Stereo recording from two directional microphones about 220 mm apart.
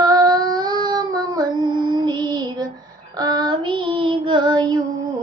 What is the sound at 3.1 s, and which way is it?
Child singing, 20° right (ahead or behind).